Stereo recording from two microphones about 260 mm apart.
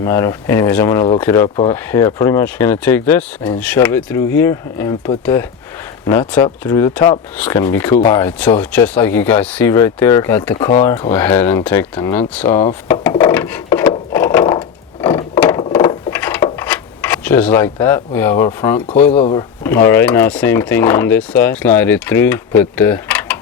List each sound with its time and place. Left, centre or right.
0.0 s speech: centre
13.3 s wood: centre
15.0 s a sound: centre
19.1 s speech: left
19.6 s speech: centre
22.7 s a sound: centre